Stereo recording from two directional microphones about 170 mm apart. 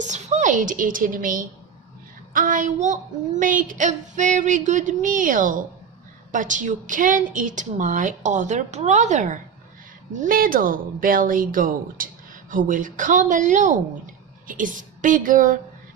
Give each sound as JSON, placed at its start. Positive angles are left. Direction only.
{"t": 0.0, "sound": "a woman's voice", "side_deg": -45}